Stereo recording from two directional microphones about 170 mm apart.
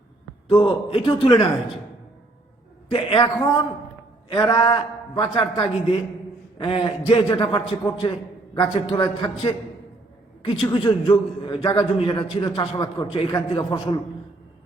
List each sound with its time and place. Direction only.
0.4 s a man's voice: 30° left (ahead or behind)
2.9 s a man's voice: 30° left (ahead or behind)